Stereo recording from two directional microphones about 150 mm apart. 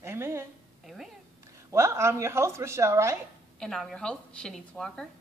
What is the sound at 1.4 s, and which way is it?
A woman's voice, 20° right (ahead or behind).